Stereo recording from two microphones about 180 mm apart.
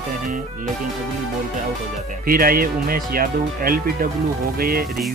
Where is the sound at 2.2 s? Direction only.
55° right (ahead or behind).